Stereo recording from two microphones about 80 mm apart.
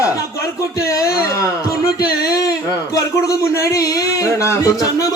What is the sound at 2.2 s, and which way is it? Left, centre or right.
A man's voice, left.